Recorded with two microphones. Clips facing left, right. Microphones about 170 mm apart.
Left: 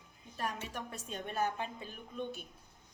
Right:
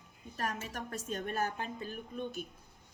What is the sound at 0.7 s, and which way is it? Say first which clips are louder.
A woman's voice: right 3 dB; 40° right (ahead or behind).